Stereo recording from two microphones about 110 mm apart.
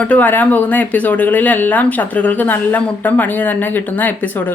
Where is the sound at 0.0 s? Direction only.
15° left (ahead or behind).